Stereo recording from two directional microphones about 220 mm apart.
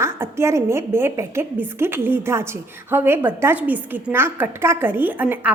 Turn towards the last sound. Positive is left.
turn(degrees=-10)  # may be behind; listen again after turning